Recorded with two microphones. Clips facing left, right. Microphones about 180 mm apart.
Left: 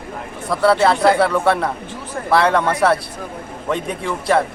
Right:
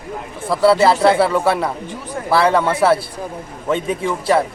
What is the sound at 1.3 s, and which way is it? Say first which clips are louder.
Speech: even; centre (ahead or behind).